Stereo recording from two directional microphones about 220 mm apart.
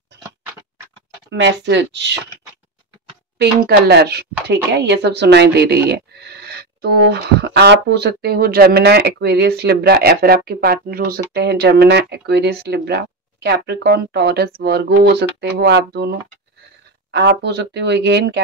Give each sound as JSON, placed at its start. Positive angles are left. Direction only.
{"t": 1.3, "sound": "speech", "side_deg": -55}
{"t": 3.3, "sound": "speech", "side_deg": -45}